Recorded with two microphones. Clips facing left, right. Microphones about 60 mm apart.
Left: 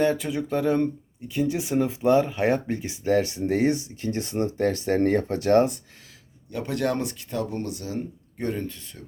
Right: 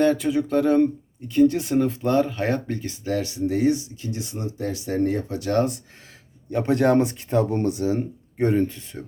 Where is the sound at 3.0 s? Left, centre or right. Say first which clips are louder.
Left 3 dB; left.